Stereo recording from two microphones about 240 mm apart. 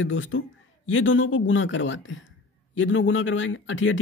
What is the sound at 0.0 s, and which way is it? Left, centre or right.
Speech, left.